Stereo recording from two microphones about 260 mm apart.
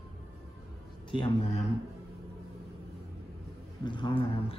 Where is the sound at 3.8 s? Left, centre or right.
Centre.